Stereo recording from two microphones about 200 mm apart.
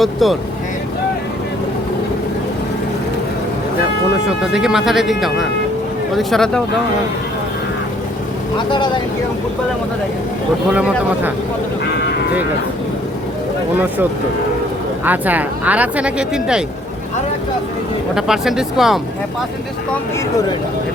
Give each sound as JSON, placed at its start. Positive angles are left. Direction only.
{"t": 0.0, "sound": "speech", "side_deg": 0}
{"t": 4.3, "sound": "speech", "side_deg": -5}
{"t": 8.5, "sound": "speech", "side_deg": 25}
{"t": 10.7, "sound": "speech", "side_deg": -5}
{"t": 11.9, "sound": "sheep", "side_deg": 55}
{"t": 15.0, "sound": "speech", "side_deg": -10}
{"t": 18.1, "sound": "speech", "side_deg": 0}